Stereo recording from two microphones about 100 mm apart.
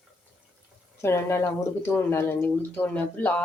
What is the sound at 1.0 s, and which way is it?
Speech, 25° left (ahead or behind).